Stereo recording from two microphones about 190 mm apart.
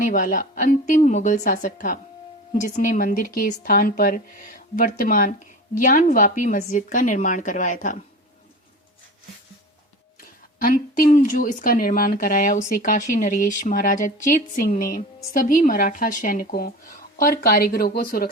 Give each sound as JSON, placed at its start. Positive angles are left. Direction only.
{"t": 0.0, "sound": "speech", "side_deg": 45}
{"t": 10.6, "sound": "speech", "side_deg": 50}